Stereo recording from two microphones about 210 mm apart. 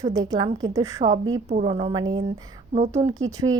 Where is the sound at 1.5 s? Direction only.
30° right (ahead or behind).